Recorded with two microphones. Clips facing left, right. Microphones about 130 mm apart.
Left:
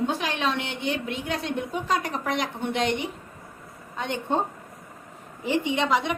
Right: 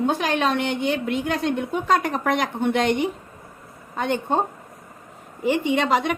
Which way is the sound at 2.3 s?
55° right (ahead or behind).